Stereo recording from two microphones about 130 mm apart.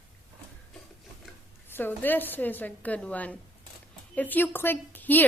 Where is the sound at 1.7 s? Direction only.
15° left (ahead or behind).